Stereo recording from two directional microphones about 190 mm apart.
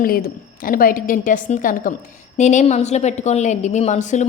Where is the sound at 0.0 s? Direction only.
50° left (ahead or behind).